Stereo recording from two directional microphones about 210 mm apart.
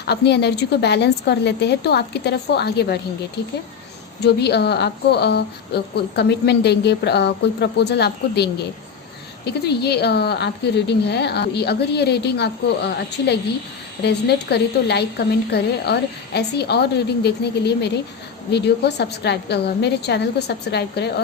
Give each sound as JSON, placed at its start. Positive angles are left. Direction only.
{"t": 0.1, "sound": "speech", "side_deg": 50}
{"t": 4.2, "sound": "speech", "side_deg": 55}